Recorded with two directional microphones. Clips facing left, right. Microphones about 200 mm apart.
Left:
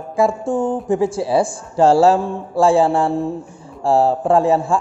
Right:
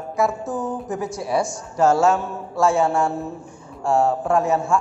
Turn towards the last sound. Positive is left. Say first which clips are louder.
# left 5 dB
turn(degrees=30)  # may be behind; listen again after turning